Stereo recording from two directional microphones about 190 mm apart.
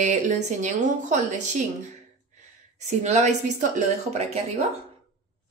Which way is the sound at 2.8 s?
35° right (ahead or behind).